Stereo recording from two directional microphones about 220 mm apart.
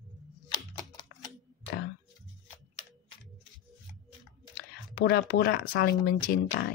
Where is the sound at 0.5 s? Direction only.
20° left (ahead or behind).